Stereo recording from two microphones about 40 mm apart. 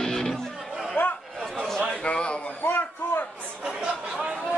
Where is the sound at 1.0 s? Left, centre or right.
Left.